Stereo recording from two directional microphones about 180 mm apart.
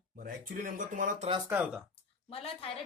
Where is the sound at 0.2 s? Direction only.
50° right (ahead or behind).